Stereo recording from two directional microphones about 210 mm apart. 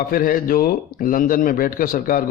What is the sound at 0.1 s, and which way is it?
Speech, 45° left (ahead or behind).